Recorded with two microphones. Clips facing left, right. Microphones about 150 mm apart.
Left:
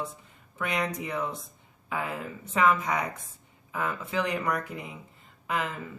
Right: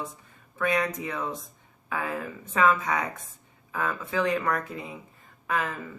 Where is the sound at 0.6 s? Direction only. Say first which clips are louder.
Right 4 dB; 20° left (ahead or behind).